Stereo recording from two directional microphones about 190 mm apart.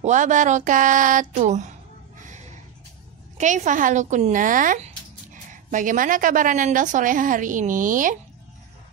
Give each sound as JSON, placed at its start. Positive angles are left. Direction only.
{"t": 0.0, "sound": "speech", "side_deg": -40}
{"t": 3.3, "sound": "speech", "side_deg": -40}